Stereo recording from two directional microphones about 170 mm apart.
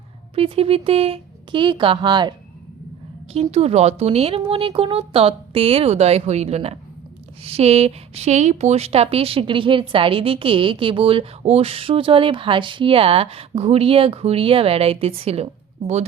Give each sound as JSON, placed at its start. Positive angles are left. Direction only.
{"t": 0.3, "sound": "speech", "side_deg": -35}
{"t": 3.3, "sound": "speech", "side_deg": -35}